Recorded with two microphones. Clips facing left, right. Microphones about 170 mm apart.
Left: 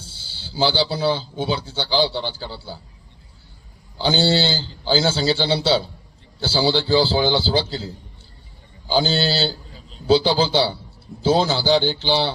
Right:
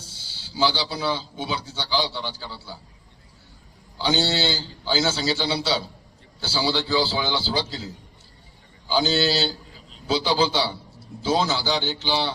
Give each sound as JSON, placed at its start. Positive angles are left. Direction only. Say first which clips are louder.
{"t": 0.0, "sound": "speech", "louder": "left 4 dB", "side_deg": 30}
{"t": 3.9, "sound": "speech", "louder": "left 4 dB", "side_deg": 30}
{"t": 8.9, "sound": "speech", "louder": "left 2 dB", "side_deg": 30}